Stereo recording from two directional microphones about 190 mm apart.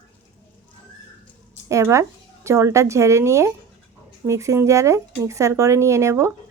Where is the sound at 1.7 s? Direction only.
15° right (ahead or behind).